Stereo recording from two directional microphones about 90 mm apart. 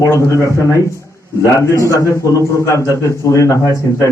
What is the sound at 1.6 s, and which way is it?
A man's voice, 35° left (ahead or behind).